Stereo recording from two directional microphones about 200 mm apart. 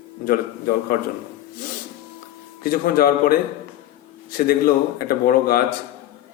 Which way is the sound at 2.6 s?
45° left (ahead or behind).